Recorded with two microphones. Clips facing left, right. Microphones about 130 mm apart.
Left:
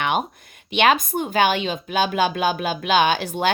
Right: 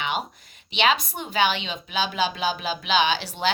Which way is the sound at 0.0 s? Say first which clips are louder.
Left 6 dB; 55° left (ahead or behind).